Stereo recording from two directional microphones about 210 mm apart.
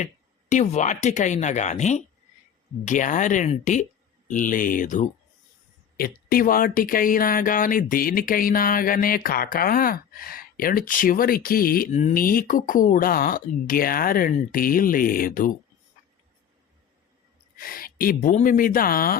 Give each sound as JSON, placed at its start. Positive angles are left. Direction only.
{"t": 0.0, "sound": "speech", "side_deg": 35}
{"t": 17.6, "sound": "speech", "side_deg": 45}